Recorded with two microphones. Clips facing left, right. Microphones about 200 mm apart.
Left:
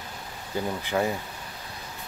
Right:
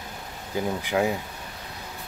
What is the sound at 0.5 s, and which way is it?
Speech, 10° right (ahead or behind).